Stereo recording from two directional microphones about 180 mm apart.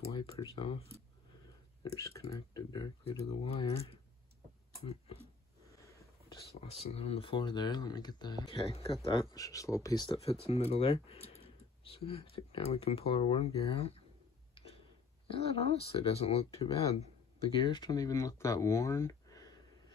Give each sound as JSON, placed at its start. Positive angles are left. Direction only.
{"t": 0.1, "sound": "speech", "side_deg": 30}
{"t": 2.0, "sound": "speech", "side_deg": 15}
{"t": 4.8, "sound": "speech", "side_deg": 35}
{"t": 6.6, "sound": "speech", "side_deg": 35}
{"t": 10.4, "sound": "speech", "side_deg": 35}
{"t": 15.2, "sound": "speech", "side_deg": 35}